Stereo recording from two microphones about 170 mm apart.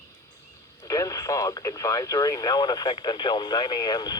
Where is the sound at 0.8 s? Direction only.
20° left (ahead or behind).